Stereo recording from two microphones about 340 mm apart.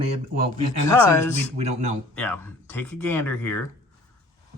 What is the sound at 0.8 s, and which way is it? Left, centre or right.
Speech, centre.